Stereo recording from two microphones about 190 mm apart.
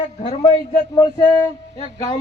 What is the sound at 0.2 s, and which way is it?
Speech, 30° left (ahead or behind).